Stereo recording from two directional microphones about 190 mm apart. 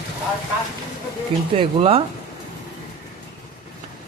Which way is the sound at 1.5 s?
30° right (ahead or behind).